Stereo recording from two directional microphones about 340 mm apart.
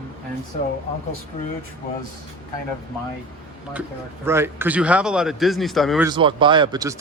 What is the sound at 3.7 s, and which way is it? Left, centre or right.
A man's voice, centre.